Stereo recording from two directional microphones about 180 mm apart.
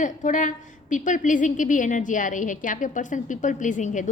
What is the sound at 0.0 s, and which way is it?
A woman's voice, 45° left (ahead or behind).